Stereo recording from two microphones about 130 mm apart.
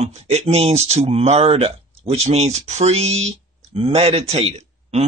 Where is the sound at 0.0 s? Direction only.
55° right (ahead or behind).